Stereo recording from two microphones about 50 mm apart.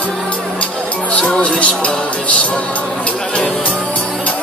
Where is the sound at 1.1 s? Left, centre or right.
Left.